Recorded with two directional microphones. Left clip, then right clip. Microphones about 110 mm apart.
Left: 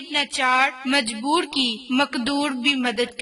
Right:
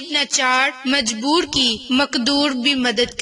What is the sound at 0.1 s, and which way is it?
A woman's voice, 45° right (ahead or behind).